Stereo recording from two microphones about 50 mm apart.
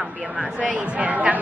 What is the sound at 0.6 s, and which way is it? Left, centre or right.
Speech, right.